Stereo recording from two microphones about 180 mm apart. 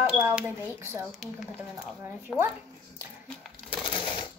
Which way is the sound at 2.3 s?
10° left (ahead or behind).